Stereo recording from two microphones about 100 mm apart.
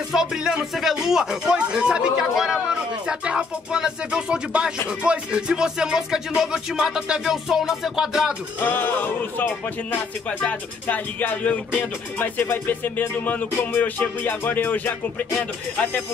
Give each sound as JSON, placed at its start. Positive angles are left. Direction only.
{"t": 0.1, "sound": "speech", "side_deg": -5}
{"t": 8.5, "sound": "music", "side_deg": 20}